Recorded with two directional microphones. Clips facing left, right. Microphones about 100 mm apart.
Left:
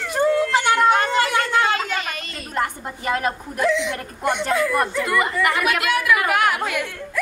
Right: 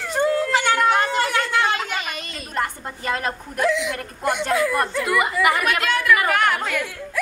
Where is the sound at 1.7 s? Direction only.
15° right (ahead or behind).